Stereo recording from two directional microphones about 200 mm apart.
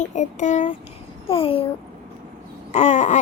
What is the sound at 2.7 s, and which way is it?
Speech, 35° left (ahead or behind).